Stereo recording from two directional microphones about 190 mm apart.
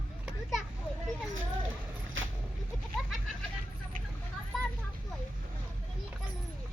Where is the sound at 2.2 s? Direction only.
90° right.